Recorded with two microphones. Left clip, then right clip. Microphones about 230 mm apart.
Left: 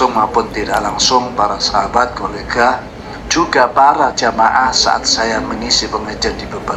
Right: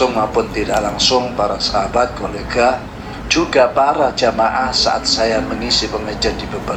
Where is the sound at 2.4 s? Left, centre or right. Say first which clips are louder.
Left 1 dB; centre.